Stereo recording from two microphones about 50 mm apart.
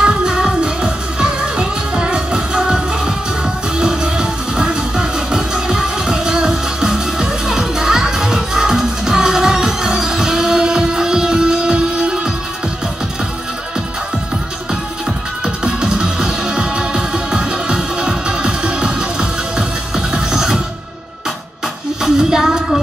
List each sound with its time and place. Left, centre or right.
0.0 s music: centre
15.4 s music: centre
22.0 s child singing: centre